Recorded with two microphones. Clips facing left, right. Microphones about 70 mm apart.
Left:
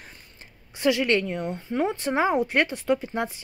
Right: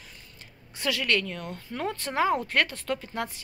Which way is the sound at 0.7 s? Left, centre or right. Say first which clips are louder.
Left 6 dB; left.